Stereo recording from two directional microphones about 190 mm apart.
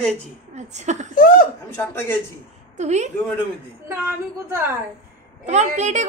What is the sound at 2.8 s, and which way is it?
Speech, 35° right (ahead or behind).